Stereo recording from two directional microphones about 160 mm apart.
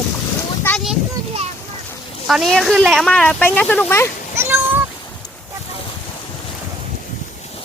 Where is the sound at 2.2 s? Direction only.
Centre (ahead or behind).